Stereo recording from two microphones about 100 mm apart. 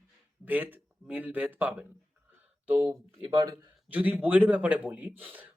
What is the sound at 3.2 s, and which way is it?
Speech, 45° right (ahead or behind).